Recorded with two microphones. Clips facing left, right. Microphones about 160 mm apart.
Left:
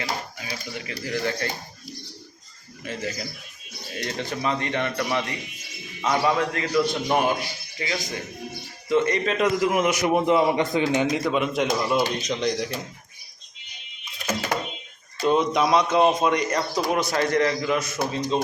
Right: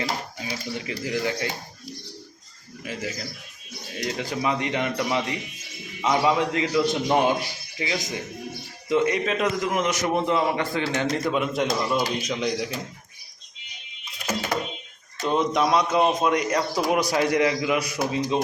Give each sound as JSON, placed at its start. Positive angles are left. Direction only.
{"t": 0.0, "sound": "speech", "side_deg": -30}
{"t": 2.8, "sound": "a man's voice", "side_deg": -5}
{"t": 11.2, "sound": "a man's voice", "side_deg": 0}
{"t": 15.2, "sound": "a man's voice", "side_deg": 0}